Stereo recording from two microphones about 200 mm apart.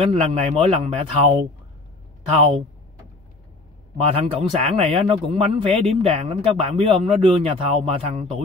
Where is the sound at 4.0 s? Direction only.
30° right (ahead or behind).